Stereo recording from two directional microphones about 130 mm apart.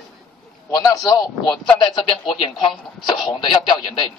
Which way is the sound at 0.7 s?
30° left (ahead or behind).